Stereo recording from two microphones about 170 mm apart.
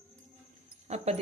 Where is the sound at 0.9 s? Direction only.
40° right (ahead or behind).